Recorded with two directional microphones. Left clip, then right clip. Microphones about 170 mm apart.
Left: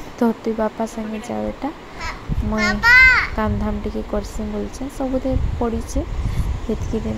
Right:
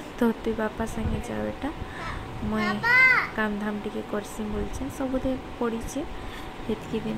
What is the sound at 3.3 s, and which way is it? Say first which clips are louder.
Speech: left 5 dB; 15° left (ahead or behind).